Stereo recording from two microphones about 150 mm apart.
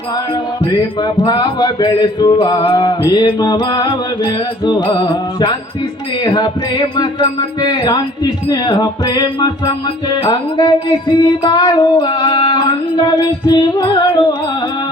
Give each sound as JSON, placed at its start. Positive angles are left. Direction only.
{"t": 1.0, "sound": "music", "side_deg": 30}
{"t": 6.2, "sound": "music", "side_deg": 30}